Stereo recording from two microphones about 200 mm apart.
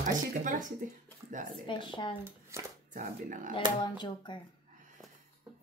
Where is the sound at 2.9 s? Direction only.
40° right (ahead or behind).